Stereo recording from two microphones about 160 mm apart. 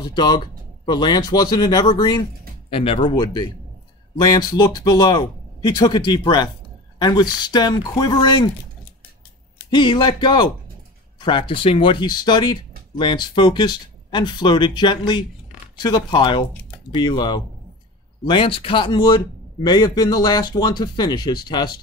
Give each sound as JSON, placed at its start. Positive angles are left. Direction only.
{"t": 0.1, "sound": "speech", "side_deg": 25}
{"t": 9.7, "sound": "speech", "side_deg": 30}